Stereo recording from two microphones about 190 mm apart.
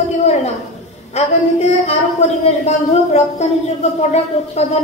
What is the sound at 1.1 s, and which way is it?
Speech, 35° left (ahead or behind).